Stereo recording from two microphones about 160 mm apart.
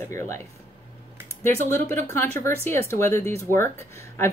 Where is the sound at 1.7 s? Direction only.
15° left (ahead or behind).